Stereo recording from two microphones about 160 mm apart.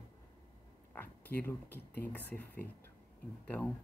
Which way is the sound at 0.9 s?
10° left (ahead or behind).